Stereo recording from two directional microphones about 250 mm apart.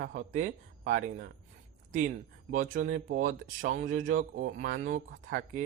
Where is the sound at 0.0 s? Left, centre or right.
Right.